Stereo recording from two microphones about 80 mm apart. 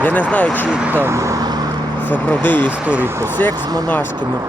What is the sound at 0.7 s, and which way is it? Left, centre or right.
Speech, right.